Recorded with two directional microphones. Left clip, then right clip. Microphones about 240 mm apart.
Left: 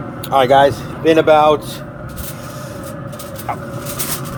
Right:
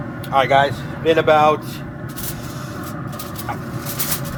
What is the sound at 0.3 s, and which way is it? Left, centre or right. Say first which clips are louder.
Speech: left 4 dB; left.